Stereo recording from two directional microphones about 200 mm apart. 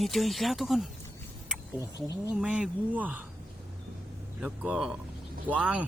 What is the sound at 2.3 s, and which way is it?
Speech, 5° right (ahead or behind).